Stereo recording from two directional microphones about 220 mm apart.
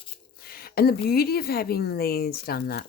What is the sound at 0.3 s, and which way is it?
Speech, 45° left (ahead or behind).